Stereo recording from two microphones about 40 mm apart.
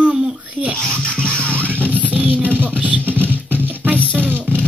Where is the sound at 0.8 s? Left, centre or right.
Left.